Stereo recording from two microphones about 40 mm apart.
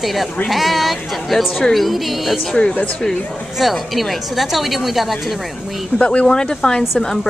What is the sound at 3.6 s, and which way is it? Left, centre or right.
A woman's voice, centre.